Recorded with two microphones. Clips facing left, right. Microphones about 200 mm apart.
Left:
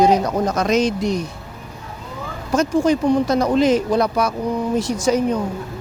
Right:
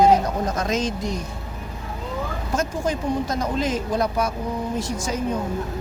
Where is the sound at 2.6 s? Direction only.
75° left (ahead or behind).